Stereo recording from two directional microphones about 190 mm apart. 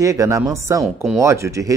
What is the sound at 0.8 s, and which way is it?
Speech, centre (ahead or behind).